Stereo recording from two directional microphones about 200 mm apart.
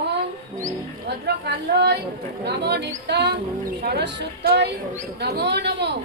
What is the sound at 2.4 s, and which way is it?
A woman's voice, 55° right (ahead or behind).